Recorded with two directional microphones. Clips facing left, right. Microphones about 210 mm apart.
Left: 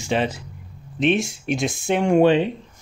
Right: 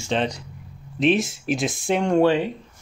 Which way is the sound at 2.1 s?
20° left (ahead or behind).